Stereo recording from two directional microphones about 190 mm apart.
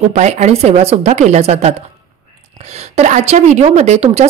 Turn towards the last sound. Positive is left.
turn(degrees=-35)  # may be behind; listen again after turning